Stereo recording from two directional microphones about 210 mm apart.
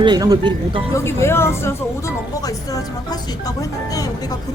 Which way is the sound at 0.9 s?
10° left (ahead or behind).